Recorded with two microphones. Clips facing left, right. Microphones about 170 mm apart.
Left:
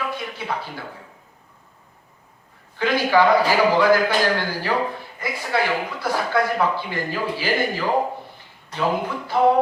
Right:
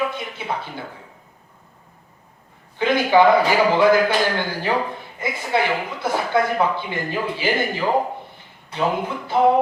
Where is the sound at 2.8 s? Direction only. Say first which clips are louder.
Right 2 dB; 20° right (ahead or behind).